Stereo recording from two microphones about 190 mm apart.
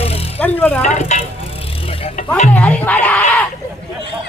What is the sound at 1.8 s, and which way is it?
Vehicle, 35° left (ahead or behind).